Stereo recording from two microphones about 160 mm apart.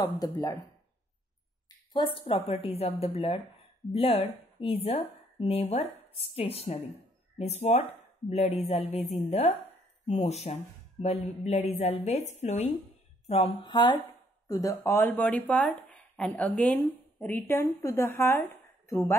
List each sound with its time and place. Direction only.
0.0 s speech: 20° left (ahead or behind)
1.9 s speech: 30° left (ahead or behind)
13.6 s speech: 30° left (ahead or behind)